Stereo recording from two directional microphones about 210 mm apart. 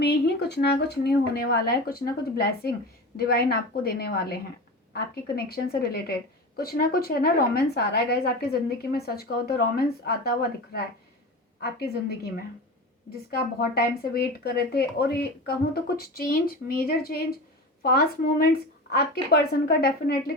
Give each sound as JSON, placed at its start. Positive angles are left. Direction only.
{"t": 0.0, "sound": "a woman's voice", "side_deg": 50}
{"t": 13.3, "sound": "a woman's voice", "side_deg": 45}